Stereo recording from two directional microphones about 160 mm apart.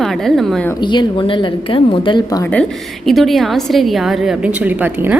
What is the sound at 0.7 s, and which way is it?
A woman's voice, 30° left (ahead or behind).